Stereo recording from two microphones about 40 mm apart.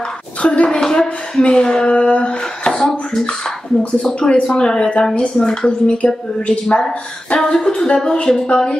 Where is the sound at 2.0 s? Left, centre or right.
Left.